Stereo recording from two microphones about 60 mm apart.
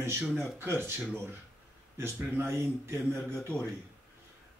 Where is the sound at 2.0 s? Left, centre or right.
Right.